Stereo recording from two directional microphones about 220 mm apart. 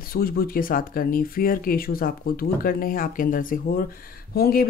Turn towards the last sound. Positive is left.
turn(degrees=45)  # may be behind; listen again after turning